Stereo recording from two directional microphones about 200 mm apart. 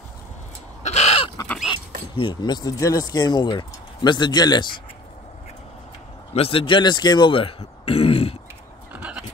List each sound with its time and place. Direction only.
0.8 s crow: 35° left (ahead or behind)
1.3 s crow: 15° left (ahead or behind)
2.1 s speech: 20° left (ahead or behind)
6.3 s speech: 30° left (ahead or behind)
8.9 s a sound: 5° right (ahead or behind)